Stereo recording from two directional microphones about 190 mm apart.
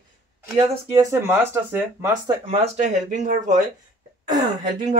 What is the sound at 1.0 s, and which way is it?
Speech, 15° right (ahead or behind).